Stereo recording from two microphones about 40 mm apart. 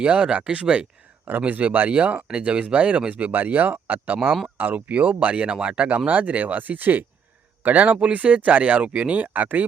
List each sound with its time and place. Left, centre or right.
0.0 s speech: right
1.5 s speech: right
1.9 s speech: right
3.3 s speech: right
6.1 s speech: right